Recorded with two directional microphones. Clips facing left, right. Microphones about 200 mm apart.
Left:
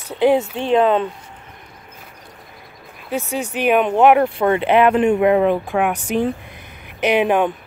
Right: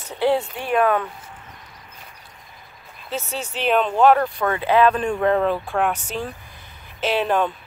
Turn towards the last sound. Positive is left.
turn(degrees=15)  # may be behind; listen again after turning